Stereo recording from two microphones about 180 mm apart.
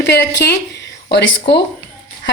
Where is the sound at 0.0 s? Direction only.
70° left (ahead or behind).